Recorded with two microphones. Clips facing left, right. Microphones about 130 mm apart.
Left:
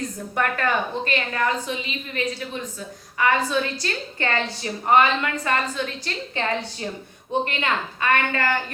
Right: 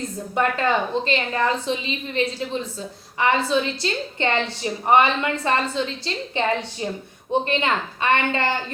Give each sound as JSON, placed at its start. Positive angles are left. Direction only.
{"t": 0.3, "sound": "a woman's voice", "side_deg": -20}